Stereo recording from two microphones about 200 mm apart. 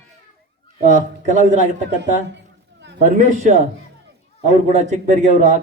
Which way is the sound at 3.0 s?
40° right (ahead or behind).